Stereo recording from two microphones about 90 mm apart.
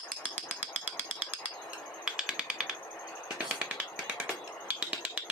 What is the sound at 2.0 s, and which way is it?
Typewriter, 5° right (ahead or behind).